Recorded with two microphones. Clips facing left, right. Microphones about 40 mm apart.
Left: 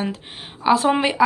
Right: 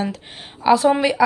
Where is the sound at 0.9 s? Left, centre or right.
Left.